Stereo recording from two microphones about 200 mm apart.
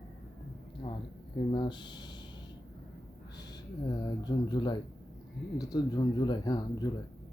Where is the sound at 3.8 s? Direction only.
20° left (ahead or behind).